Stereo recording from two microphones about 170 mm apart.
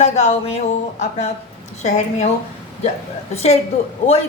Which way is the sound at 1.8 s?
40° left (ahead or behind).